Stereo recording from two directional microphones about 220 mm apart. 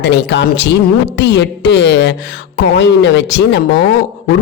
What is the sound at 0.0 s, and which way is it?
A man's voice, 55° left (ahead or behind).